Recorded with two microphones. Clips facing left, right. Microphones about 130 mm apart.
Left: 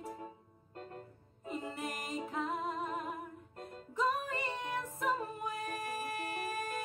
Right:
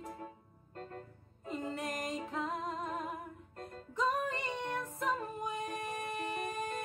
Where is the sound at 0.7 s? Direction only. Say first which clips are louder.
Right 1 dB; 15° left (ahead or behind).